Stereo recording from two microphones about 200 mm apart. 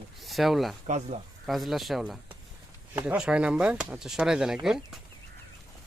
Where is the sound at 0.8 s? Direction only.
35° right (ahead or behind).